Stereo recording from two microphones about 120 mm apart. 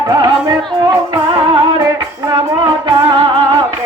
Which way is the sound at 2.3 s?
40° right (ahead or behind).